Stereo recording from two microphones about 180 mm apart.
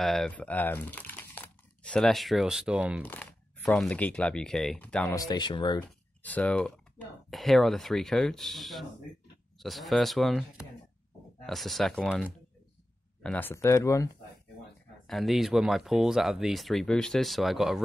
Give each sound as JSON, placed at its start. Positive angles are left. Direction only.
{"t": 0.0, "sound": "speech", "side_deg": 0}
{"t": 3.0, "sound": "speech", "side_deg": 10}
{"t": 5.1, "sound": "speech", "side_deg": 20}
{"t": 5.9, "sound": "speech", "side_deg": 10}
{"t": 13.2, "sound": "speech", "side_deg": 10}
{"t": 15.0, "sound": "speech", "side_deg": 0}